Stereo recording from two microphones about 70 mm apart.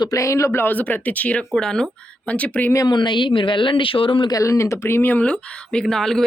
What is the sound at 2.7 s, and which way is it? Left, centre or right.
Speech, left.